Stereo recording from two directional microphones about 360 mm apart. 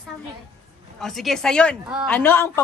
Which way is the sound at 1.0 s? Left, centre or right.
Centre.